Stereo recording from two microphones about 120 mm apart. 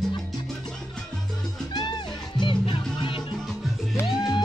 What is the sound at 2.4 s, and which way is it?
Music, 40° left (ahead or behind).